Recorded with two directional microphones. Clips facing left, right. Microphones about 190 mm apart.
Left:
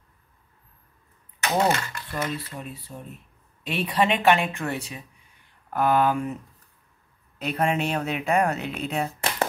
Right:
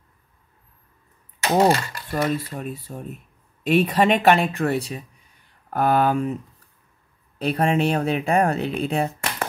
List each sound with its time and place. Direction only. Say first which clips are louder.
1.4 s a sound: right 5 dB; 35° right (ahead or behind)
2.2 s speech: right 7 dB; 45° right (ahead or behind)
7.3 s speech: right 4 dB; 30° right (ahead or behind)